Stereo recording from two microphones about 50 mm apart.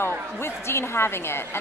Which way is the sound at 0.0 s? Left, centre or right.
Left.